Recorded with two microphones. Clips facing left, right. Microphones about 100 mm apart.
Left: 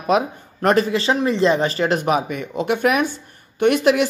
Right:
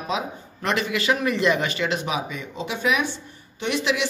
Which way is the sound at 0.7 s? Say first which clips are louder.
Left 5 dB; 35° left (ahead or behind).